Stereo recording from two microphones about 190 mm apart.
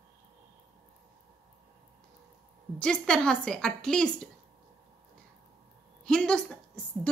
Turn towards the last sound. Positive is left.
turn(degrees=5)  # may be behind; listen again after turning